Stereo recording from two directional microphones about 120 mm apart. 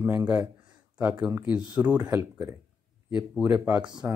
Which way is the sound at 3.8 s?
40° right (ahead or behind).